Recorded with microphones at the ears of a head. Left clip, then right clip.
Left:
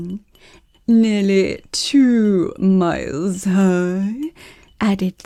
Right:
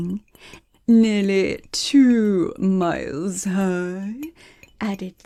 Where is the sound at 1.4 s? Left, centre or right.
Centre.